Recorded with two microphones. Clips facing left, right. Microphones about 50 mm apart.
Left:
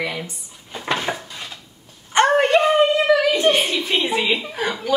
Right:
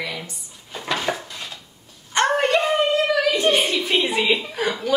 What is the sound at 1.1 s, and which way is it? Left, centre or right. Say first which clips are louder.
Dishes: right 1 dB; centre.